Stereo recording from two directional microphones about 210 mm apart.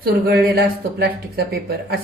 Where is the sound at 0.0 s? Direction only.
45° right (ahead or behind).